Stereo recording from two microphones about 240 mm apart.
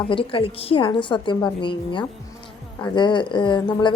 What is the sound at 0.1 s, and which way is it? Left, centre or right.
A woman's voice, left.